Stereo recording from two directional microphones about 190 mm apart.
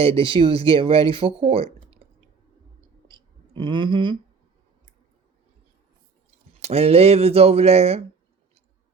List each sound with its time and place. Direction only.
0.0 s speech: 30° right (ahead or behind)
3.1 s clicking: 25° right (ahead or behind)
6.6 s speech: 35° right (ahead or behind)